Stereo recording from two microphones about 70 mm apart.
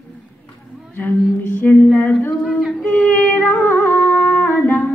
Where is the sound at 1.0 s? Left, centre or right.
Left.